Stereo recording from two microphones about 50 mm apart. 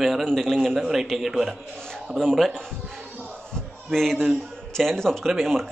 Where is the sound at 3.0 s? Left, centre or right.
Right.